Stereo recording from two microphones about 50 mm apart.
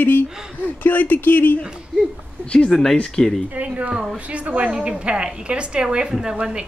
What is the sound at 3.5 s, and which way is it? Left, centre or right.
A woman's voice, right.